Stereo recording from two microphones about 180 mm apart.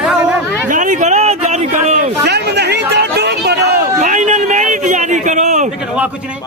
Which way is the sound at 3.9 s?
45° right (ahead or behind).